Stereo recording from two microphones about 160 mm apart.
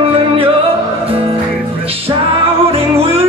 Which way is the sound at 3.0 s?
40° right (ahead or behind).